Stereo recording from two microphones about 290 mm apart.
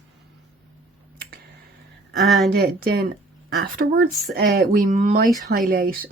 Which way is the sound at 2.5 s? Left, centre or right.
Right.